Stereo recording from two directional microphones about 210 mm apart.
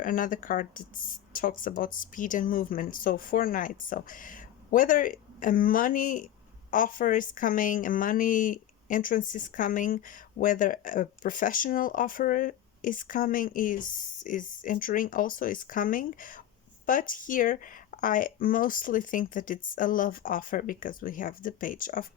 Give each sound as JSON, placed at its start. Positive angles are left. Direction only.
{"t": 0.0, "sound": "a woman's voice", "side_deg": 40}